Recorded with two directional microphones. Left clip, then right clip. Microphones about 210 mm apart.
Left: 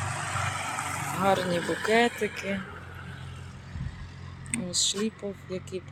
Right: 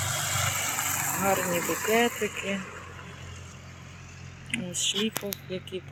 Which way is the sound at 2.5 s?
35° left (ahead or behind).